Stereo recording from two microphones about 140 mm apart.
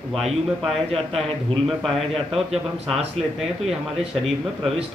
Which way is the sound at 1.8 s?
Centre (ahead or behind).